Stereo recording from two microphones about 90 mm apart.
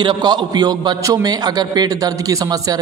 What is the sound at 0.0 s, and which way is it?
A man's voice, 55° right (ahead or behind).